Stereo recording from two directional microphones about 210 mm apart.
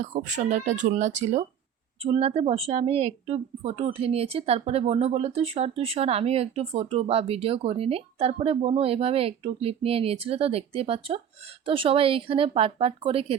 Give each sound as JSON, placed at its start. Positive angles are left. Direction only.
{"t": 0.0, "sound": "speech", "side_deg": -35}